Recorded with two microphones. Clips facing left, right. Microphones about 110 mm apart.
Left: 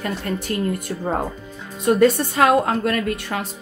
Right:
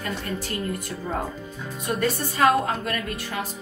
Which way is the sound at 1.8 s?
80° left.